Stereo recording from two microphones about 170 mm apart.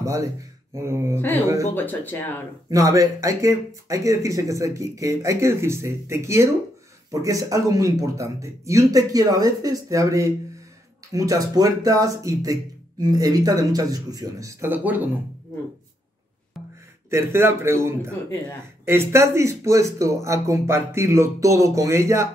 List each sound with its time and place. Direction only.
0.0 s speech: 20° right (ahead or behind)
1.8 s speech: 10° left (ahead or behind)
2.7 s speech: 20° right (ahead or behind)
17.1 s speech: 15° right (ahead or behind)